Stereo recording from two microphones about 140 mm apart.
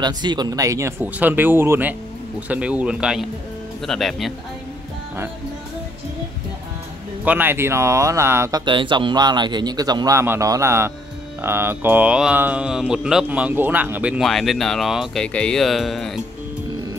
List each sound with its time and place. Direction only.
0.0 s speech: 30° right (ahead or behind); by 4.3 s centre (ahead or behind)
7.2 s speech: 15° right (ahead or behind)
14.2 s speech: centre (ahead or behind)